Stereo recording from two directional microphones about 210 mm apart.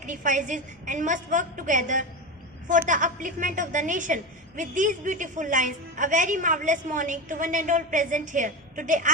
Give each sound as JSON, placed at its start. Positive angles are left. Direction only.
{"t": 0.0, "sound": "a woman's voice", "side_deg": -35}